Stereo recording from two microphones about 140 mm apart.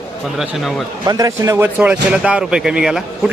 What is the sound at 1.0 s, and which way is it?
Speech, 25° right (ahead or behind).